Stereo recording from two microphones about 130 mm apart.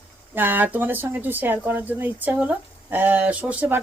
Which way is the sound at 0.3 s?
15° right (ahead or behind).